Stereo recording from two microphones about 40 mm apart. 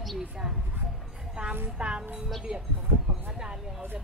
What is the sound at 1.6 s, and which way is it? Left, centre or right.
Speech, right.